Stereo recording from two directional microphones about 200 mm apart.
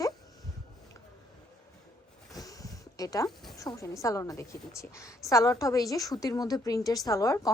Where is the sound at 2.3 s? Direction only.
15° left (ahead or behind).